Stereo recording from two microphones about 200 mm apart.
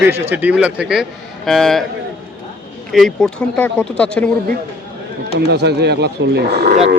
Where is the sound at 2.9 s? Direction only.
Centre (ahead or behind).